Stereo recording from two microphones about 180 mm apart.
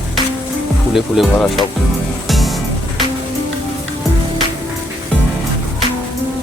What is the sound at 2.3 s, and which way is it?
Music, centre (ahead or behind).